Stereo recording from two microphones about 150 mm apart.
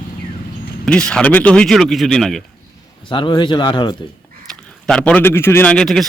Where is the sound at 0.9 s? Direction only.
5° left (ahead or behind).